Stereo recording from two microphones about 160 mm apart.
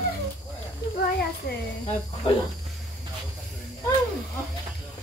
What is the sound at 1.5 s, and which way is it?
Speech, 85° left.